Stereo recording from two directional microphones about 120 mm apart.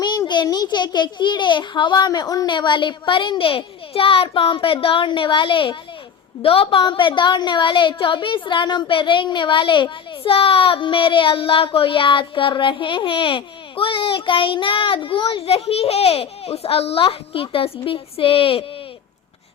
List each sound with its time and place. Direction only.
0.0 s a child's voice: 40° left (ahead or behind)